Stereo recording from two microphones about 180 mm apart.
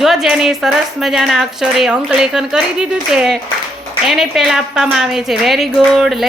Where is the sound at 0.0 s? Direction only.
Centre (ahead or behind).